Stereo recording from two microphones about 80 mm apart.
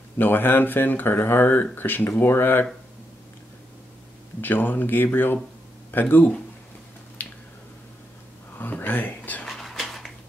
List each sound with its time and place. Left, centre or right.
0.2 s speech: left
4.4 s speech: left
7.2 s finger snapping: centre
8.5 s a sound: left
9.5 s dog: centre